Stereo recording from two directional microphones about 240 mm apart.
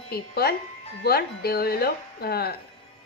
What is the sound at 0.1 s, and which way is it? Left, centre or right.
A woman's voice, left.